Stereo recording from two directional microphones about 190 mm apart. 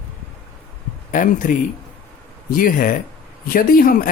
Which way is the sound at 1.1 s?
45° left (ahead or behind).